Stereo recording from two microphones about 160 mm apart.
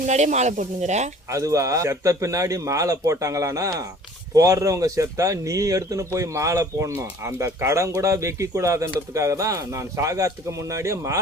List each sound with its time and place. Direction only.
0.0 s speech: 50° right (ahead or behind)
1.3 s speech: 20° right (ahead or behind)